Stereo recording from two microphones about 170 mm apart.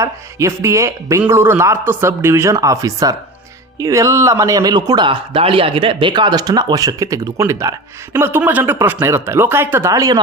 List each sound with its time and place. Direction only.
0.0 s a man's voice: 15° right (ahead or behind)